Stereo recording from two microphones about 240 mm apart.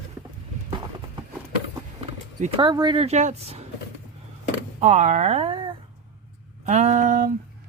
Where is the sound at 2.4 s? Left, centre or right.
Right.